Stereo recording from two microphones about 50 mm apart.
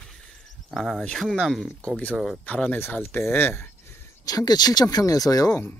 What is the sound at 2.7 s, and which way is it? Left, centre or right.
Speech, left.